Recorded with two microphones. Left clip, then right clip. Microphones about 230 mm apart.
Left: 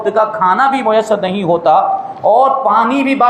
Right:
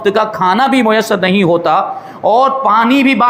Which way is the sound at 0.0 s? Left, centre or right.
Right.